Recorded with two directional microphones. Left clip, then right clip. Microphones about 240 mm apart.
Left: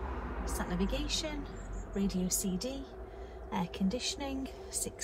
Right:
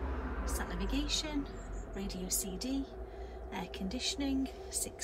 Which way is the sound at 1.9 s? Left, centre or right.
Centre.